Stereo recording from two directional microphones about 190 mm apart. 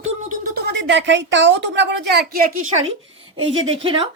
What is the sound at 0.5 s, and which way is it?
A woman's voice, 65° right (ahead or behind).